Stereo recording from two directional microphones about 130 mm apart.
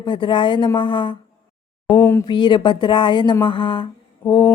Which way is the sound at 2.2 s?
35° left (ahead or behind).